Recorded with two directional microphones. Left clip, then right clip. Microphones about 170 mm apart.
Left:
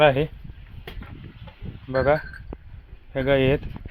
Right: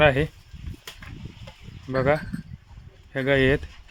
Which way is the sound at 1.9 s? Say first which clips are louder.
Left 2 dB; 20° right (ahead or behind).